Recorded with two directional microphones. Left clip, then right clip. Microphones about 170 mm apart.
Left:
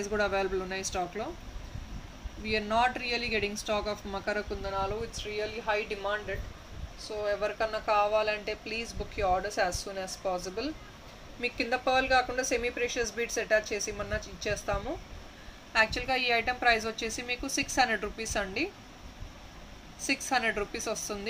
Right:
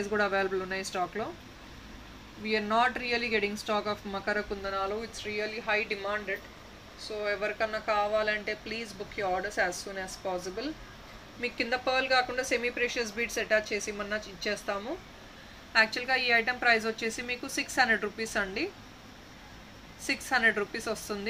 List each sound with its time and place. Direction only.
0.0 s speech: 5° left (ahead or behind)
2.4 s speech: 10° left (ahead or behind)
20.1 s speech: 10° left (ahead or behind)